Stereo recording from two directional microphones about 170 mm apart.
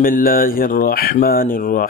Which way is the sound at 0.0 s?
55° left (ahead or behind).